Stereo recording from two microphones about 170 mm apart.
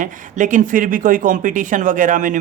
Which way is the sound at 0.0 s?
50° right (ahead or behind).